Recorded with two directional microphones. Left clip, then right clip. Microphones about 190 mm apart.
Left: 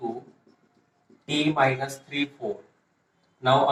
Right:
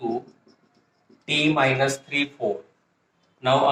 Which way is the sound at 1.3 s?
30° right (ahead or behind).